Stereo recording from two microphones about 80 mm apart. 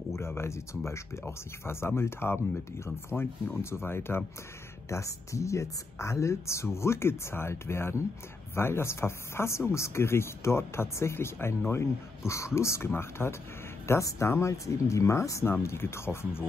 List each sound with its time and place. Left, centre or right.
0.1 s speech: left